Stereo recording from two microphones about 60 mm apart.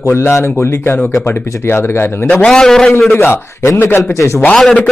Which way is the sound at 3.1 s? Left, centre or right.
Left.